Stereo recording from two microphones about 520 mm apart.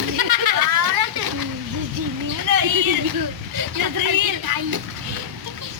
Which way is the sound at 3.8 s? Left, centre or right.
Right.